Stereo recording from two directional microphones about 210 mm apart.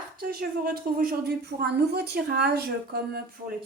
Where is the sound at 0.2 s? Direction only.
45° right (ahead or behind).